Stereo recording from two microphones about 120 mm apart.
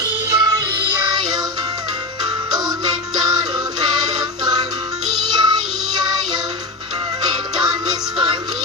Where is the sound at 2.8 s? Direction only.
35° right (ahead or behind).